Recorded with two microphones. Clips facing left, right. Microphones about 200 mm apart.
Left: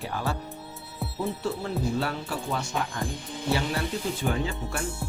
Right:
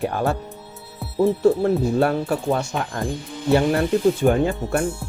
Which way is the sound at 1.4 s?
55° right (ahead or behind).